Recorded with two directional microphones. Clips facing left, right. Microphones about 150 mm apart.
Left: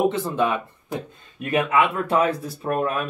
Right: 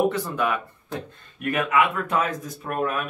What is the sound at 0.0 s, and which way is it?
Speech, 20° left (ahead or behind).